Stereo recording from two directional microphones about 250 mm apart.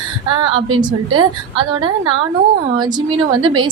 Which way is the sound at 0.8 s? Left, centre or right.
Centre.